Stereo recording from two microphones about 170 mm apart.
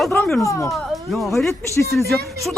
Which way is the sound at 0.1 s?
15° left (ahead or behind).